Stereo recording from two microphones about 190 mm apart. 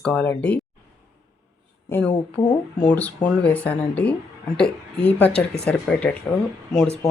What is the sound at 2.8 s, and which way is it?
Speech, 10° left (ahead or behind).